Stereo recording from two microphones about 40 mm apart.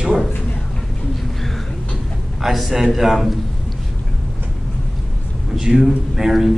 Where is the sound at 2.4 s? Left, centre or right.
Centre.